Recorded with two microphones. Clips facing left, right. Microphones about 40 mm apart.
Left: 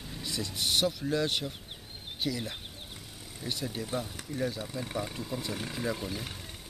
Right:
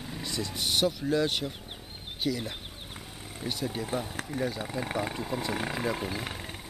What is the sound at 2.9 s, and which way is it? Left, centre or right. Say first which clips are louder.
Wild animals: right 4 dB; right.